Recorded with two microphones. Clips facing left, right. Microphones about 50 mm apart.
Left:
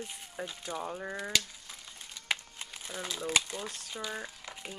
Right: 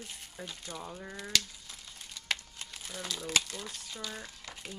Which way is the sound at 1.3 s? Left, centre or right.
Left.